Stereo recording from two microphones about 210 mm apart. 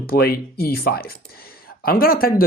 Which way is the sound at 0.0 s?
45° left (ahead or behind).